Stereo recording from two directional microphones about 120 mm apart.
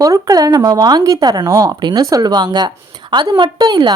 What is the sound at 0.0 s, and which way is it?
A woman's voice, 30° right (ahead or behind).